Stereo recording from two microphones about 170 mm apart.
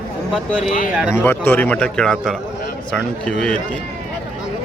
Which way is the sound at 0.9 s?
5° right (ahead or behind).